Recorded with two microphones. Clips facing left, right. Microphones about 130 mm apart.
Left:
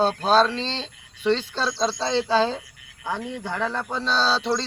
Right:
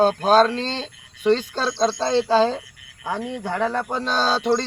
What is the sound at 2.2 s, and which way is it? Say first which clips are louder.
A man's voice: right 3 dB; 10° right (ahead or behind).